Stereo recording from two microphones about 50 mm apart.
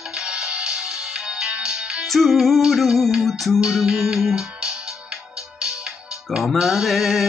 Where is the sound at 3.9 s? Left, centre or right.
Centre.